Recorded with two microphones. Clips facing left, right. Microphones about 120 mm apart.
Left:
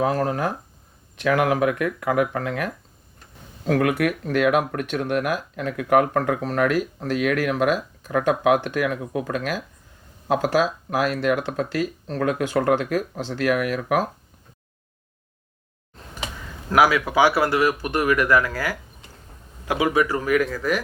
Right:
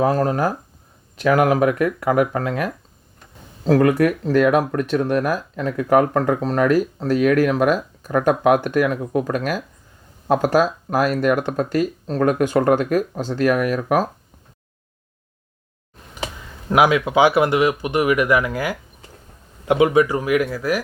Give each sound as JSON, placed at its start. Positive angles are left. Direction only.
{"t": 0.0, "sound": "speech", "side_deg": -40}
{"t": 16.6, "sound": "speech", "side_deg": -20}